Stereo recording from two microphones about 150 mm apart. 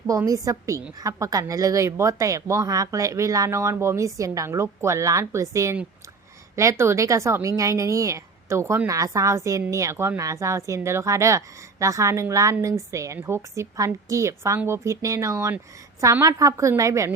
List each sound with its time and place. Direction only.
0.1 s a woman's voice: 20° right (ahead or behind)